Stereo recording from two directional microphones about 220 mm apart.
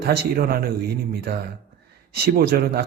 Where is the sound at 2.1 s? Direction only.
45° right (ahead or behind).